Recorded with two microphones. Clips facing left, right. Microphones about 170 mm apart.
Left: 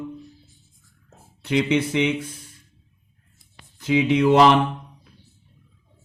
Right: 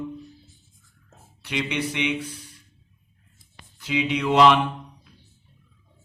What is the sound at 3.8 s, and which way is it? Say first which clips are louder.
Speech: left 7 dB; 45° left (ahead or behind).